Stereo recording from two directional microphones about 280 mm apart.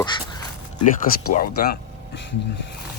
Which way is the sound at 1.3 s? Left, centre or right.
Left.